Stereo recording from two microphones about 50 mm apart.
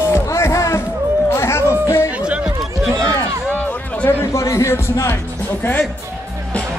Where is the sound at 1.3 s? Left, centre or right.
Left.